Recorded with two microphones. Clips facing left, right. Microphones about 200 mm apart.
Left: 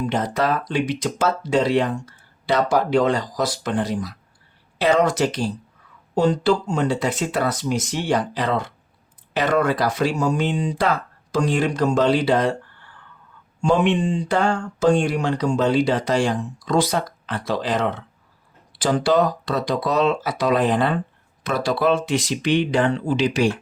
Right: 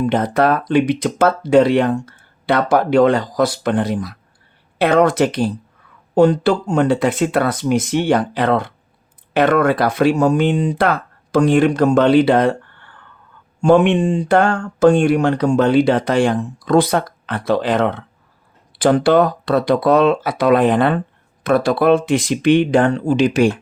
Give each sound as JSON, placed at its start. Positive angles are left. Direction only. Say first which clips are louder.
{"t": 0.0, "sound": "speech", "louder": "right 6 dB", "side_deg": -55}